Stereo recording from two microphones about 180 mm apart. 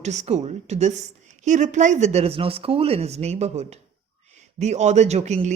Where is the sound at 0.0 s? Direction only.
40° right (ahead or behind).